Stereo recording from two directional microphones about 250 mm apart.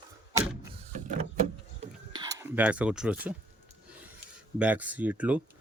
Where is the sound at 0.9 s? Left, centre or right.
Right.